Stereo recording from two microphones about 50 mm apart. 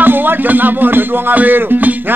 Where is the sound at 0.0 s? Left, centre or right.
Right.